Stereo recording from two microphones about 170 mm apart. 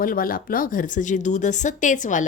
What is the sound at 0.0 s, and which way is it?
Speech, 55° left (ahead or behind).